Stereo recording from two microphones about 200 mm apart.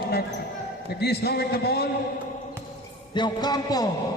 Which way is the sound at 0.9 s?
55° left (ahead or behind).